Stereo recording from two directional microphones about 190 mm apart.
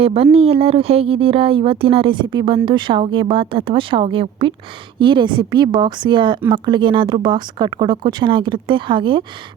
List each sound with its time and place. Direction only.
0.0 s speech: 30° right (ahead or behind)